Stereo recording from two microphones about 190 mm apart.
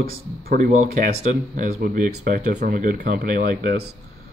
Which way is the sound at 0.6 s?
35° right (ahead or behind).